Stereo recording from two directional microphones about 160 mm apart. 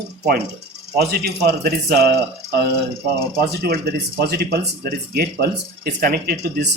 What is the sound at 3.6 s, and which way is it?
Speech, 85° right.